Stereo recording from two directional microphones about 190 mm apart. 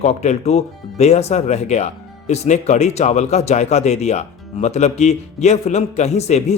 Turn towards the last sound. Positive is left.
turn(degrees=35)  # may be behind; listen again after turning